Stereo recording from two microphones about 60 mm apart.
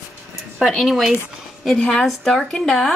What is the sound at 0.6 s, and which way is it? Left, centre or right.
Speech, centre.